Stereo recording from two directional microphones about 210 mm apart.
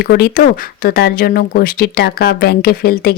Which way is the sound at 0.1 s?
45° left (ahead or behind).